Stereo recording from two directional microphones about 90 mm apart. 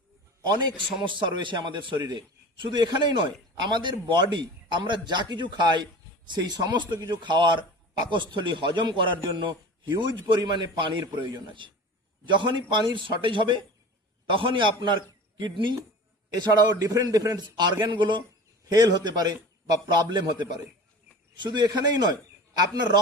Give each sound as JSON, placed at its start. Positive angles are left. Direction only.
{"t": 0.8, "sound": "a man's voice", "side_deg": -65}
{"t": 2.6, "sound": "a man's voice", "side_deg": -55}
{"t": 16.3, "sound": "a man's voice", "side_deg": -50}